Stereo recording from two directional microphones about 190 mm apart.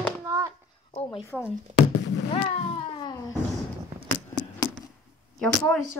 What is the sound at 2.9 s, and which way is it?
Cat, 20° left (ahead or behind).